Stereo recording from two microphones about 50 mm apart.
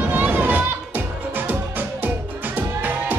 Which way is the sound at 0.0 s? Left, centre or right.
Right.